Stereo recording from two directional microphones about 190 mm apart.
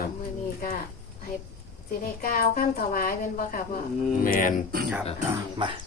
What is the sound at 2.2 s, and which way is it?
Speech, 50° left (ahead or behind).